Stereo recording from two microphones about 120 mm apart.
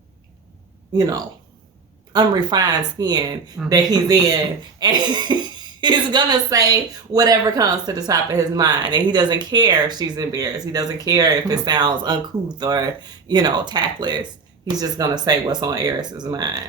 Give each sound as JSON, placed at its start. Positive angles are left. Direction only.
{"t": 0.9, "sound": "speech", "side_deg": -30}